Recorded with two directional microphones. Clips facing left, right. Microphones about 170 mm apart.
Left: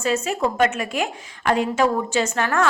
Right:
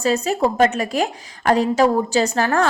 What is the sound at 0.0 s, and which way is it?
A woman's voice, 35° right (ahead or behind).